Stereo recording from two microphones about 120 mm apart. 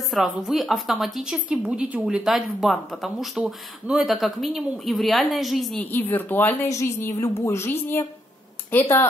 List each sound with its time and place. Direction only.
0.1 s a woman's voice: 5° right (ahead or behind)
5.8 s a woman's voice: 15° left (ahead or behind)